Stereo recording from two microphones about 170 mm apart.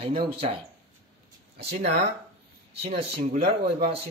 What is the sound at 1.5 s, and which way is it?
Speech, 40° right (ahead or behind).